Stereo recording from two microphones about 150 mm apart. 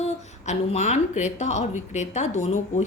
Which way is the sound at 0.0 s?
50° left (ahead or behind).